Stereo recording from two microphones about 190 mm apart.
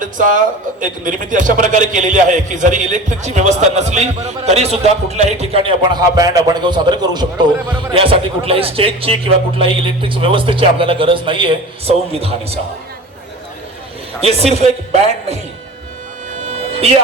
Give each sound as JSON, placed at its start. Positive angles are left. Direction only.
{"t": 0.0, "sound": "a man's voice", "side_deg": -45}
{"t": 14.2, "sound": "a man's voice", "side_deg": -35}
{"t": 16.4, "sound": "music", "side_deg": -35}